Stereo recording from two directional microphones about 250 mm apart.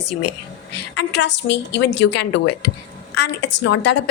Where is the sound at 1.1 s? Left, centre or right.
Left.